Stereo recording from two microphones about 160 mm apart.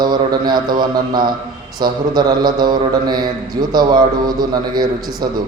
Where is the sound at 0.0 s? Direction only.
25° right (ahead or behind).